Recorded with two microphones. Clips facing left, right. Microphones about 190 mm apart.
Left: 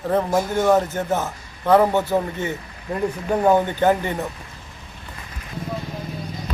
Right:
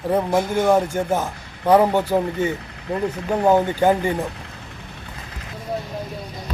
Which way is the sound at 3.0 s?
5° left (ahead or behind).